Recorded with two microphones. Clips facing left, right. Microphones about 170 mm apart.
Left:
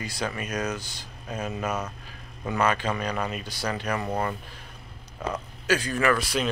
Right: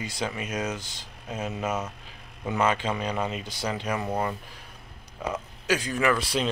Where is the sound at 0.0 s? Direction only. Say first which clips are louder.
Even; 20° right (ahead or behind).